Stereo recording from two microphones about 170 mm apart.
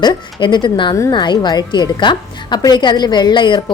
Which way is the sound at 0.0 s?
25° left (ahead or behind).